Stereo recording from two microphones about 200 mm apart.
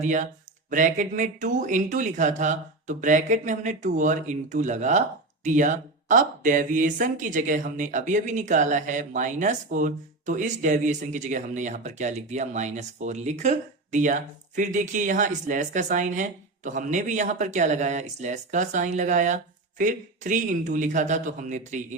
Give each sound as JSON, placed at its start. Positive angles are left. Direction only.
{"t": 0.0, "sound": "speech", "side_deg": -40}